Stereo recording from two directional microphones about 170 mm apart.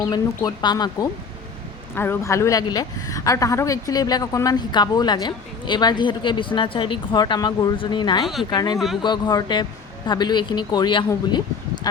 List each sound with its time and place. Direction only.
0.0 s a woman's voice: 25° left (ahead or behind)
8.2 s speech: centre (ahead or behind)
8.4 s a woman's voice: 25° left (ahead or behind)